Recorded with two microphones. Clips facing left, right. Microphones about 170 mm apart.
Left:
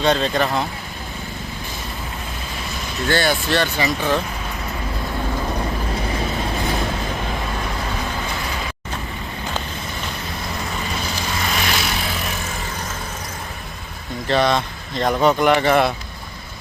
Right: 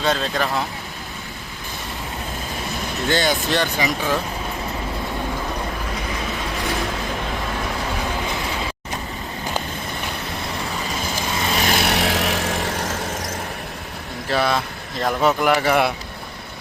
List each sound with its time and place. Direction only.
0.0 s speech: centre (ahead or behind)
3.1 s speech: 20° right (ahead or behind)
11.5 s vehicle: 40° right (ahead or behind)
11.8 s vehicle: 70° right (ahead or behind)
14.3 s speech: 5° right (ahead or behind)